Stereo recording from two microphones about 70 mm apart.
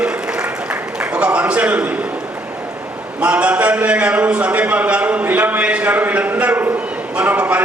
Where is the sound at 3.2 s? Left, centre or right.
Centre.